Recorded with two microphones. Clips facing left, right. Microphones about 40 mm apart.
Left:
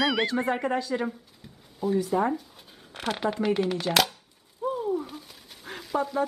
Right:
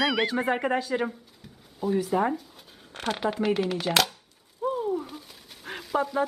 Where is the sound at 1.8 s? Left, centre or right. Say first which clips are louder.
Even; centre.